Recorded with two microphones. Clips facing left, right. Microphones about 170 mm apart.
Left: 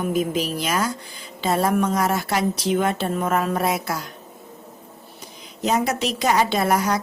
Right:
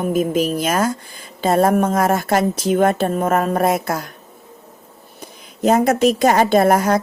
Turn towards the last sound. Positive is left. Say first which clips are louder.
# right 7 dB
turn(degrees=-50)  # may be behind; listen again after turning